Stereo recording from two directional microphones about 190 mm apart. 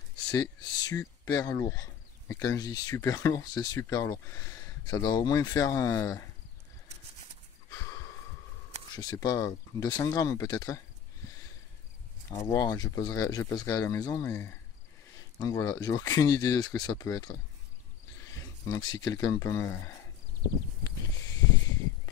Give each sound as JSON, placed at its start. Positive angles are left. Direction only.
{"t": 0.3, "sound": "speech", "side_deg": 20}
{"t": 8.9, "sound": "speech", "side_deg": 20}
{"t": 12.3, "sound": "speech", "side_deg": 20}